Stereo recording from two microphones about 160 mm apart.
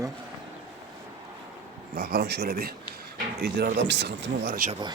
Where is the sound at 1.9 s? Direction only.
75° right (ahead or behind).